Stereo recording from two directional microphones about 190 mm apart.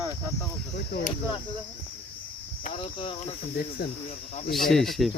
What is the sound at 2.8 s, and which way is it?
Speech, 30° left (ahead or behind).